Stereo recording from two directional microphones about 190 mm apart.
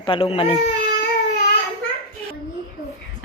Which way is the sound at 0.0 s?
30° left (ahead or behind).